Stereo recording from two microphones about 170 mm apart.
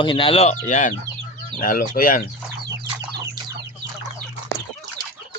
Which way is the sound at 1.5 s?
55° left (ahead or behind).